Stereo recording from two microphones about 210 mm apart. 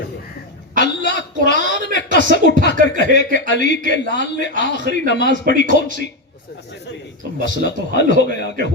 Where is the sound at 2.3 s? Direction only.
55° left (ahead or behind).